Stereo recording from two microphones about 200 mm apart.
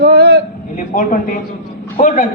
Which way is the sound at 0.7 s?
40° left (ahead or behind).